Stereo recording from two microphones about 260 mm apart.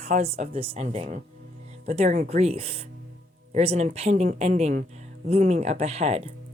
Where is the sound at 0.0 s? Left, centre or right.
Right.